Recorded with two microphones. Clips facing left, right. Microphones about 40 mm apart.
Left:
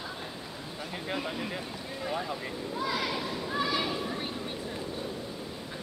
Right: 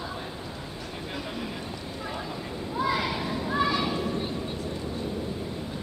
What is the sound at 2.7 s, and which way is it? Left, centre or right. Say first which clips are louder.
Children playing: right 5 dB; centre.